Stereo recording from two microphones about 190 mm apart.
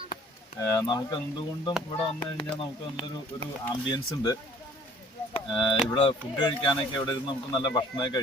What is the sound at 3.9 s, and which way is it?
Speech, 20° left (ahead or behind).